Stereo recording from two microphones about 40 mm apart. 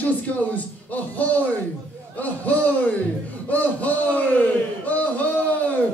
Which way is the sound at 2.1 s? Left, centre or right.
Left.